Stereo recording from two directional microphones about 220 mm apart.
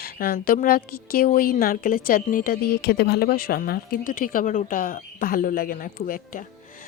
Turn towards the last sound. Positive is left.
turn(degrees=40)  # may be behind; listen again after turning